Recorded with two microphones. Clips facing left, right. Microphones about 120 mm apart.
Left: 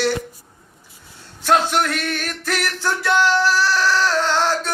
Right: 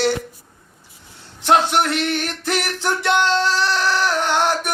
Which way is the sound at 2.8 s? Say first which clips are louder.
Left 1 dB; 20° right (ahead or behind).